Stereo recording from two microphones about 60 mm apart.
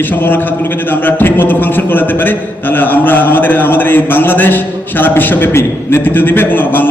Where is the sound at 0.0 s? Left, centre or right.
Left.